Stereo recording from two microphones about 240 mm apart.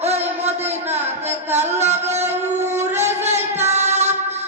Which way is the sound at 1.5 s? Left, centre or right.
Right.